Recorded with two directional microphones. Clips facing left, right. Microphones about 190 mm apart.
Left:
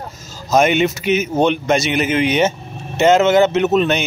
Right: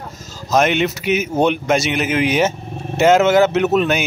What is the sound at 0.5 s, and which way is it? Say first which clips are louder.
A man's voice: left 2 dB; centre (ahead or behind).